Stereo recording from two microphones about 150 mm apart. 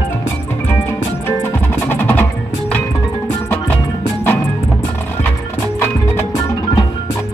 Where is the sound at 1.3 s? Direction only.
15° left (ahead or behind).